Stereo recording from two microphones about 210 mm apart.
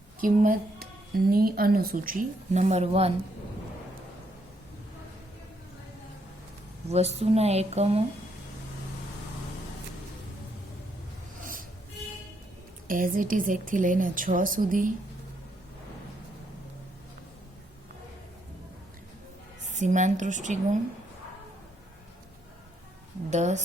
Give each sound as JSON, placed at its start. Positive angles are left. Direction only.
{"t": 0.2, "sound": "a woman's voice", "side_deg": -40}
{"t": 6.9, "sound": "speech", "side_deg": -30}
{"t": 12.9, "sound": "a woman's voice", "side_deg": -40}
{"t": 19.7, "sound": "a woman's voice", "side_deg": -35}
{"t": 23.3, "sound": "a woman's voice", "side_deg": -35}